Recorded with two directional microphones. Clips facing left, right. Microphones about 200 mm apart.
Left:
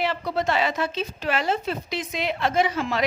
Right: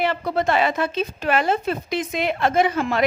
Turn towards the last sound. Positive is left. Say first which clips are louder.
# right 3 dB
turn(degrees=-55)  # may be behind; listen again after turning